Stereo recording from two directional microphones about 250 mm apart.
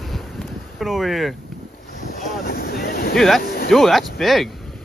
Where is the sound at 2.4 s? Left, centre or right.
Left.